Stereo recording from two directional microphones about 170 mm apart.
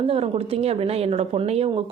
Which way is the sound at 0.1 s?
35° right (ahead or behind).